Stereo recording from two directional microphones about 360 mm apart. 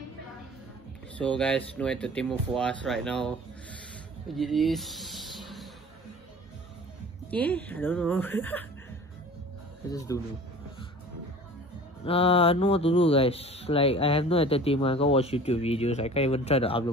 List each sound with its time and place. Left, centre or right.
1.1 s speech: centre
7.2 s speech: centre
9.8 s speech: centre
12.0 s speech: centre